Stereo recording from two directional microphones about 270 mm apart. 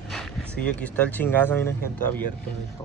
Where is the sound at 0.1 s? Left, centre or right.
Centre.